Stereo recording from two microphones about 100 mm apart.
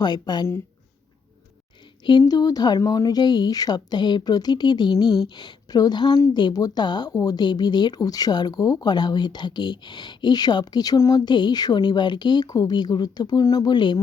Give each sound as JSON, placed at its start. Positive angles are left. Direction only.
{"t": 0.0, "sound": "speech", "side_deg": 45}
{"t": 2.0, "sound": "speech", "side_deg": 45}